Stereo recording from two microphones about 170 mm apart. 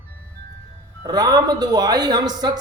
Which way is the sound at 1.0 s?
20° right (ahead or behind).